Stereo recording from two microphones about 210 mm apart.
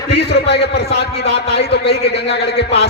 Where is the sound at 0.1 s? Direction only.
55° left (ahead or behind).